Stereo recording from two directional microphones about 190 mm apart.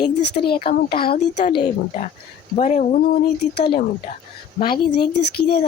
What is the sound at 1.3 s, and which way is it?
A woman's voice, 35° left (ahead or behind).